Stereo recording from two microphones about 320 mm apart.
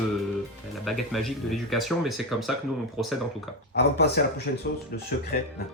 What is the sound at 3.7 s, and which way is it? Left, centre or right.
Speech, left.